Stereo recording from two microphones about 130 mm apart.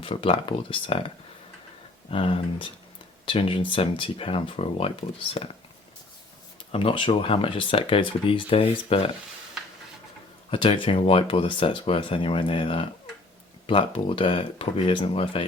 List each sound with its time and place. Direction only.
0.0 s speech: 45° left (ahead or behind)
6.7 s speech: 45° left (ahead or behind)
10.5 s speech: 40° left (ahead or behind)